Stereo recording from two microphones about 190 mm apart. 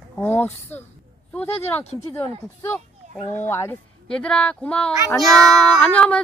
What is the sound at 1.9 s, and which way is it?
Speech, 35° left (ahead or behind).